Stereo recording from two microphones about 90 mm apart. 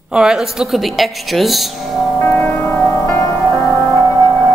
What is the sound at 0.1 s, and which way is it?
A woman's voice, 10° right (ahead or behind).